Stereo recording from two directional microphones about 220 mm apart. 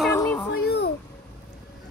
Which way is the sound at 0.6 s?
50° left (ahead or behind).